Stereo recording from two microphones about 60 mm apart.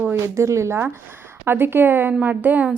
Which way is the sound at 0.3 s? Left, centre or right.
Right.